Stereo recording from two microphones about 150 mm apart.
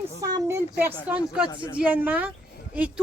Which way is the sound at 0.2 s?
20° right (ahead or behind).